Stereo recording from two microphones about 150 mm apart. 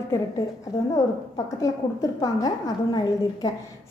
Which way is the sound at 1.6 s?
25° left (ahead or behind).